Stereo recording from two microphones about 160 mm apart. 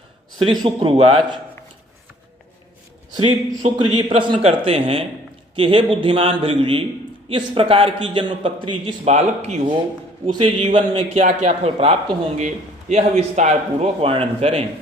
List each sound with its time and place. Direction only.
0.6 s a man's voice: 30° right (ahead or behind)
3.2 s a man's voice: 35° right (ahead or behind)
9.0 s a man's voice: 45° right (ahead or behind)
10.2 s a man's voice: 35° right (ahead or behind)
11.2 s a man's voice: 45° right (ahead or behind)